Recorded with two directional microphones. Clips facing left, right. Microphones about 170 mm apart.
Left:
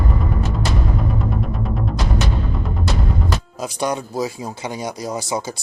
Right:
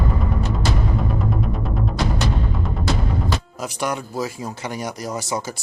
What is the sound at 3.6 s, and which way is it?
Speech, 15° left (ahead or behind).